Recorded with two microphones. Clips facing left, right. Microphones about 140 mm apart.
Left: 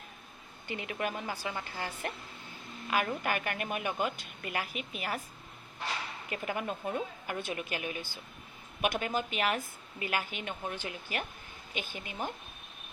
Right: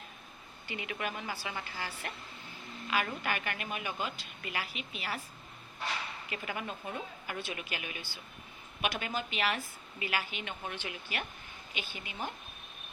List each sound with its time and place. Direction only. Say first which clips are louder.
0.7 s a woman's voice: left 3 dB; 40° left (ahead or behind)
2.9 s a woman's voice: left 2 dB; 45° left (ahead or behind)
6.3 s a woman's voice: left 5 dB; 45° left (ahead or behind)